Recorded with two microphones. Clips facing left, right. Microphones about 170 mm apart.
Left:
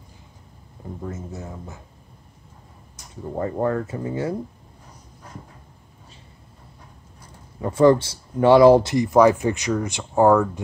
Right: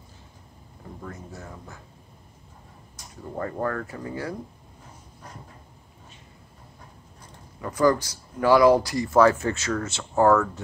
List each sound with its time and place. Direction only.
1.0 s speech: 20° left (ahead or behind)
3.3 s speech: 20° left (ahead or behind)
7.6 s speech: 25° left (ahead or behind)